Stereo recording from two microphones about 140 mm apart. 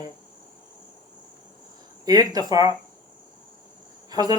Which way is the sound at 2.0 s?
25° right (ahead or behind).